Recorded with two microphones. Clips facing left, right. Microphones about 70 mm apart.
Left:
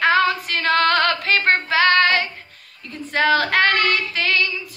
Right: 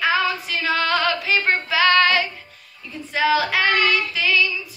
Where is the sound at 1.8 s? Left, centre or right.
Left.